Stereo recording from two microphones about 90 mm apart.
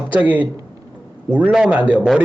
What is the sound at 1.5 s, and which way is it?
Speech, 10° right (ahead or behind).